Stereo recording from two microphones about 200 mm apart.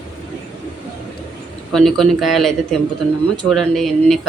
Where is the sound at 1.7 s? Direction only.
Centre (ahead or behind).